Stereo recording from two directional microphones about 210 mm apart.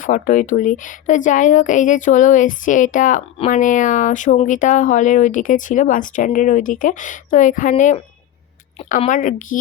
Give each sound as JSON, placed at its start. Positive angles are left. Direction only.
{"t": 0.0, "sound": "speech", "side_deg": 40}